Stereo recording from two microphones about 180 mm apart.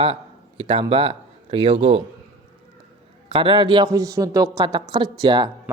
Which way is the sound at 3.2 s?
25° right (ahead or behind).